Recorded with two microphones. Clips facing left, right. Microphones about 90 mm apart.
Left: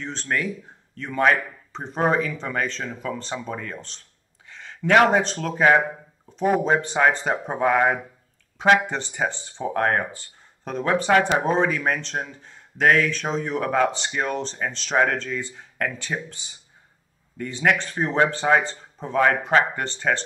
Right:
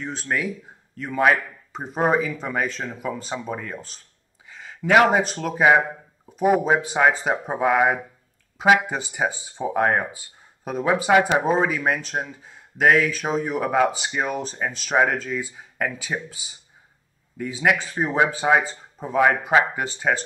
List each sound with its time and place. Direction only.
0.0 s a man's voice: 5° right (ahead or behind)